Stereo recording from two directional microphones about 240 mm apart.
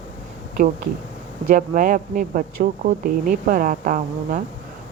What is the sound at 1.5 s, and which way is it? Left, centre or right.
Speech, right.